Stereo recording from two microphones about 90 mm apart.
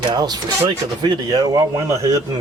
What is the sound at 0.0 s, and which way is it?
Speech, 50° right (ahead or behind).